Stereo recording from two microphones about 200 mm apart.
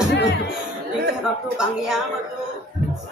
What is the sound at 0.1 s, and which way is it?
Music, 60° left (ahead or behind).